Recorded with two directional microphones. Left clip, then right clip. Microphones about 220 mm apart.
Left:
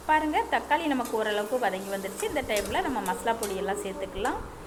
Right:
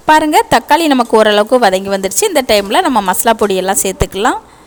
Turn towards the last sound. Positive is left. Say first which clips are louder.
# right 17 dB
turn(degrees=-55)  # may be behind; listen again after turning